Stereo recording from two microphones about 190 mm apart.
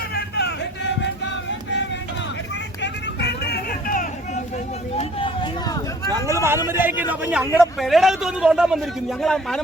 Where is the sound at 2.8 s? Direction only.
60° left (ahead or behind).